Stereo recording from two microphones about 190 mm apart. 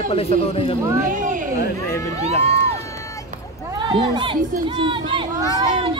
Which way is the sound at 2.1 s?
35° right (ahead or behind).